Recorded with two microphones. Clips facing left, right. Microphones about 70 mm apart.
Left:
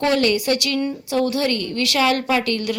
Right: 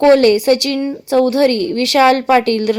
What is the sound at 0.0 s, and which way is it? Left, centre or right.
A woman's voice, right.